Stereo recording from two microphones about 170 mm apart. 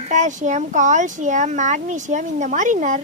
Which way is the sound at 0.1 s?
45° right (ahead or behind).